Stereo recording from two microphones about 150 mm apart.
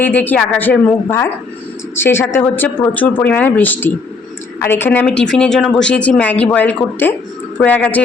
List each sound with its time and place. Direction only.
0.0 s a woman's voice: 10° left (ahead or behind)